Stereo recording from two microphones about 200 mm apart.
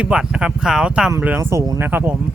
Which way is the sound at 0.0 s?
5° right (ahead or behind).